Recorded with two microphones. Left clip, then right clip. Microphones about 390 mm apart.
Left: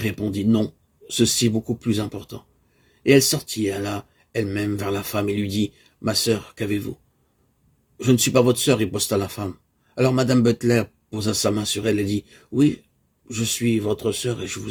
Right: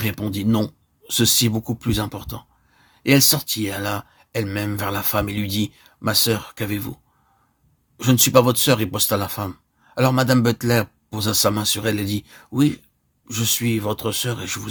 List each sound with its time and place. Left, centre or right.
0.0 s speech: right
8.0 s speech: right